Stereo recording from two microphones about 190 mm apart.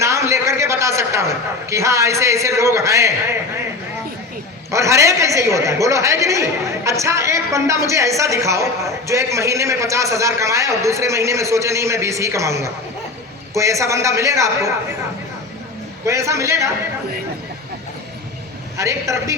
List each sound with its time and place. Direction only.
0.0 s a man's voice: 15° right (ahead or behind)
4.7 s a man's voice: 15° right (ahead or behind)
16.0 s a man's voice: 15° right (ahead or behind)
18.8 s a man's voice: 15° right (ahead or behind)